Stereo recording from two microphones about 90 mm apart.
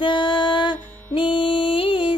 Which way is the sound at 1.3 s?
75° left (ahead or behind).